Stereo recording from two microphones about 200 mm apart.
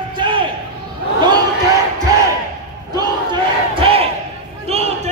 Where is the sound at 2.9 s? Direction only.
20° right (ahead or behind).